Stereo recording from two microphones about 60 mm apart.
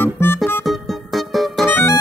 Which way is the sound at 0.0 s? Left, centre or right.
Left.